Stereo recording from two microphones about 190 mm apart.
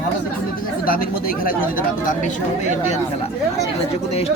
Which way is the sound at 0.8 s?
50° left (ahead or behind).